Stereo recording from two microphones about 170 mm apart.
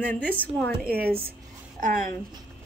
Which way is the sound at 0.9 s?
65° right (ahead or behind).